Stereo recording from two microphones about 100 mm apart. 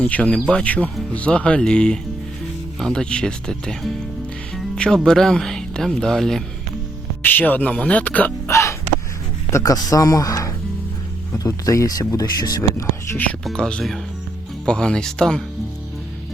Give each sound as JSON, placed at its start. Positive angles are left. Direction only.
{"t": 0.0, "sound": "speech", "side_deg": 10}
{"t": 4.5, "sound": "music", "side_deg": 5}
{"t": 5.0, "sound": "speech", "side_deg": 5}
{"t": 7.2, "sound": "speech", "side_deg": 20}
{"t": 8.4, "sound": "hiccup", "side_deg": 30}
{"t": 9.5, "sound": "speech", "side_deg": 30}
{"t": 13.4, "sound": "speech", "side_deg": 10}